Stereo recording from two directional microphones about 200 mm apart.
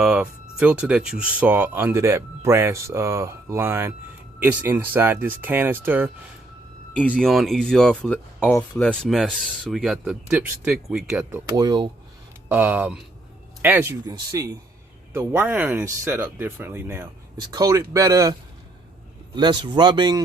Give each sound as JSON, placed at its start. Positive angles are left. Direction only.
{"t": 0.0, "sound": "speech", "side_deg": -5}
{"t": 7.0, "sound": "speech", "side_deg": 5}
{"t": 12.5, "sound": "speech", "side_deg": -5}
{"t": 19.4, "sound": "speech", "side_deg": -20}